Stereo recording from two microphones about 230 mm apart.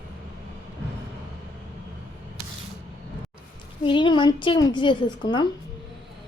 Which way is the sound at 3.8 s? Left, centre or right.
Left.